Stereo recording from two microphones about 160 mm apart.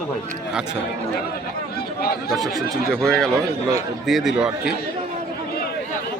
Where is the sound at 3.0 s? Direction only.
5° left (ahead or behind).